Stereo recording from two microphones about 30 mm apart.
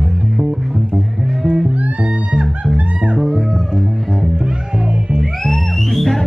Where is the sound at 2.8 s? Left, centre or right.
Right.